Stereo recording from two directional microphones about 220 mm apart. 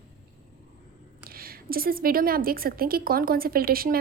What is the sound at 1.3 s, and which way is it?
A woman's voice, 40° right (ahead or behind).